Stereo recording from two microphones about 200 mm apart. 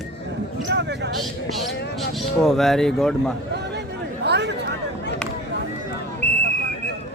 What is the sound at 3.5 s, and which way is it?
Chatter, 55° right (ahead or behind).